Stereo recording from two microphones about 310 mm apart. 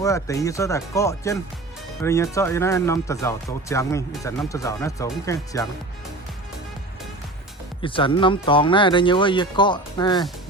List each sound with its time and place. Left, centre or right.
0.0 s speech: centre
7.8 s speech: centre